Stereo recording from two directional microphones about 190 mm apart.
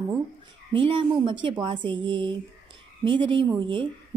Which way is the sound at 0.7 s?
25° right (ahead or behind).